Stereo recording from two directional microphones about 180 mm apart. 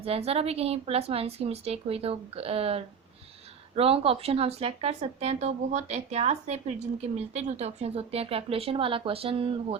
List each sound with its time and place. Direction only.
0.0 s speech: 35° right (ahead or behind)